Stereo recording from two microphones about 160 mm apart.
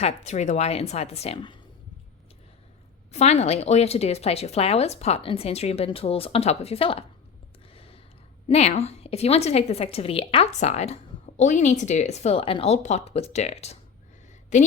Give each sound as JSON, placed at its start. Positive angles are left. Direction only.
{"t": 0.0, "sound": "a woman's voice", "side_deg": 40}
{"t": 3.1, "sound": "a woman's voice", "side_deg": 45}
{"t": 7.7, "sound": "a sound", "side_deg": 35}
{"t": 8.4, "sound": "a woman's voice", "side_deg": 40}